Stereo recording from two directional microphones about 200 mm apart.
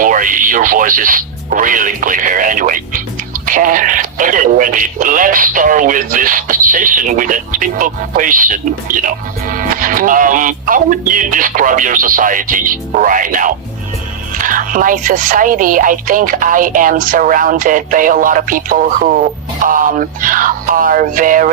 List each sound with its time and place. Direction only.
0.0 s speech: 40° right (ahead or behind)